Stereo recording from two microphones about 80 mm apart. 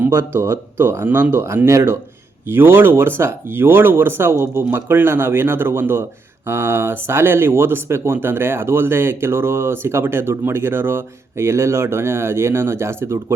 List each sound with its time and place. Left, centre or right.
0.0 s speech: right